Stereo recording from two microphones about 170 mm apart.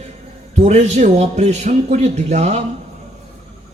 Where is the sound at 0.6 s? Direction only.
45° right (ahead or behind).